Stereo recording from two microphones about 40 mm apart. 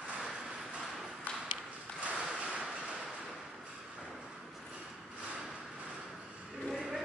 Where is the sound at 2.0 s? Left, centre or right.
Right.